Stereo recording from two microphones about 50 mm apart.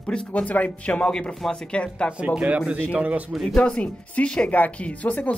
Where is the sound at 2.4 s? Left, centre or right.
Right.